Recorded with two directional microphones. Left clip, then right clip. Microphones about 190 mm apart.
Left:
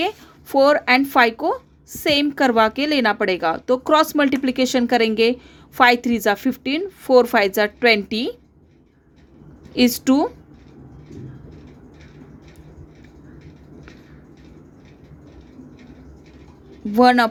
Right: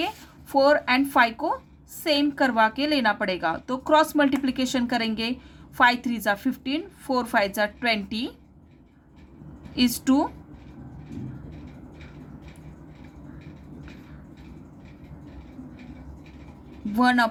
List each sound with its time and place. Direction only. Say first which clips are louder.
0.5 s a woman's voice: left 5 dB; 40° left (ahead or behind)
9.7 s a woman's voice: left 5 dB; 40° left (ahead or behind)
16.9 s a woman's voice: left 7 dB; 40° left (ahead or behind)